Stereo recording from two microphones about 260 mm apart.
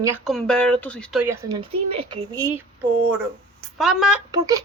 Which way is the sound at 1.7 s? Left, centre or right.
Right.